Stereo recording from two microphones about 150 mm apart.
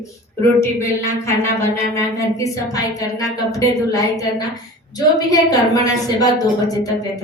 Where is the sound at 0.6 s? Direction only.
15° left (ahead or behind).